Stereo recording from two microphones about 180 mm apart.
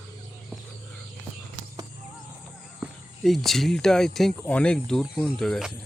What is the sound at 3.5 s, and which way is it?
Speech, centre (ahead or behind).